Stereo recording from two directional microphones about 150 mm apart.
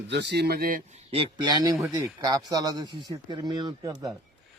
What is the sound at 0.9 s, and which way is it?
A man's voice, 40° right (ahead or behind).